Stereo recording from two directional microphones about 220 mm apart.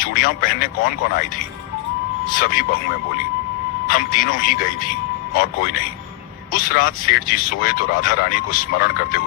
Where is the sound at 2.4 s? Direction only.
40° left (ahead or behind).